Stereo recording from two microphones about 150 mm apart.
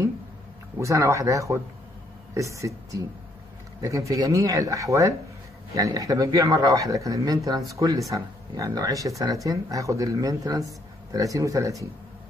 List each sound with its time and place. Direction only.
0.7 s speech: 20° right (ahead or behind)
4.1 s speech: 20° right (ahead or behind)